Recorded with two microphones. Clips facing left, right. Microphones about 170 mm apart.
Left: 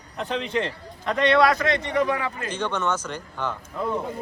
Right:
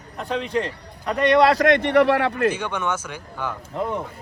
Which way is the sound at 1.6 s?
60° right (ahead or behind).